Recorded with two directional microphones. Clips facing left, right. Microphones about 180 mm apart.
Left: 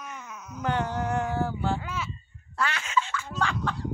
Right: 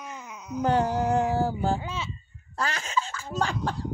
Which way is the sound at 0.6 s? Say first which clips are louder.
Right 4 dB; 35° right (ahead or behind).